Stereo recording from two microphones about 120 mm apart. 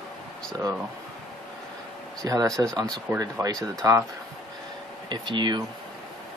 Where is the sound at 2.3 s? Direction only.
30° right (ahead or behind).